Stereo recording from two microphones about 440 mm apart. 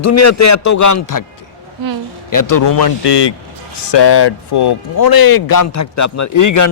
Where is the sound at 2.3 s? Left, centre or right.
Left.